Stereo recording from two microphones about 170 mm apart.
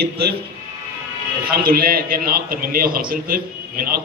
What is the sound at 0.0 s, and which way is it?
Speech, 70° right (ahead or behind).